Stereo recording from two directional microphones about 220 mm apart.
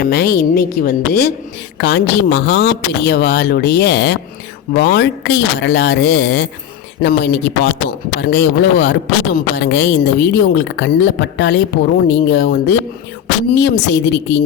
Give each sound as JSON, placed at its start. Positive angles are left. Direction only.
{"t": 0.0, "sound": "speech", "side_deg": 45}